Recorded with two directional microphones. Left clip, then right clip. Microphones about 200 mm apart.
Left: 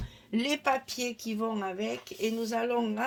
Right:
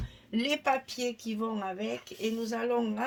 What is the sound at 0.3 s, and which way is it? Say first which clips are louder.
Speech: even; 35° left (ahead or behind).